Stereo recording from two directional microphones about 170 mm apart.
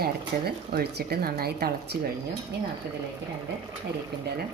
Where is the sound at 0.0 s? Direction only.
65° right (ahead or behind).